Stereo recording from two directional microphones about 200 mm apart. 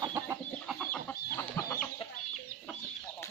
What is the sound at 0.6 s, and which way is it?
Chicken, 5° left (ahead or behind).